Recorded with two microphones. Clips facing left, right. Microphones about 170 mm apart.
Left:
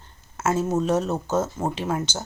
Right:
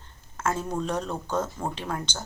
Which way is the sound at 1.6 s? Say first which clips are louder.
Left 6 dB; 20° left (ahead or behind).